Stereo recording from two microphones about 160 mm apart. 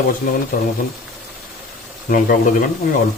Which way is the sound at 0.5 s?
70° left (ahead or behind).